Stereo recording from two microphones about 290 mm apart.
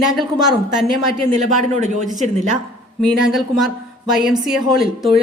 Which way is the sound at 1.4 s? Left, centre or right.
Right.